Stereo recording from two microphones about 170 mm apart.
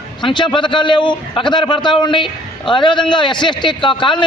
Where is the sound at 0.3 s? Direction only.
30° left (ahead or behind).